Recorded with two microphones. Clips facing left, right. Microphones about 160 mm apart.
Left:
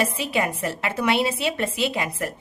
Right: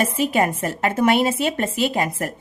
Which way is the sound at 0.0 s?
45° right (ahead or behind).